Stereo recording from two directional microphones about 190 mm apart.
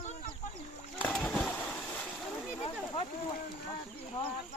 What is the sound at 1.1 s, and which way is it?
Splash, 5° left (ahead or behind).